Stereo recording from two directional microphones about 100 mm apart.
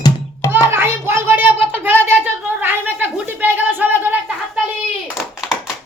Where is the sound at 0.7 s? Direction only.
25° right (ahead or behind).